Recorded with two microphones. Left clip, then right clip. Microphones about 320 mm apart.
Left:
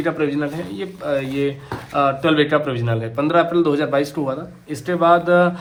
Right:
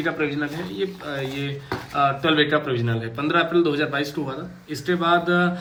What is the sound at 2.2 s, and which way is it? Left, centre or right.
Speech, left.